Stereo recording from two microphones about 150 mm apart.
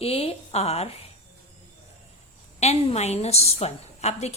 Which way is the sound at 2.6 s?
45° left (ahead or behind).